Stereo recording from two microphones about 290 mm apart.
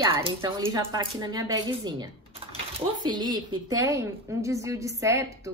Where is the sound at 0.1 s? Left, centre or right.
Centre.